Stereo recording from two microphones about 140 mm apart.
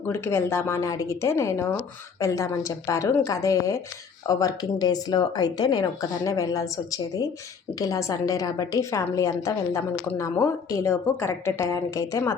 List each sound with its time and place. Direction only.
0.1 s speech: 15° left (ahead or behind)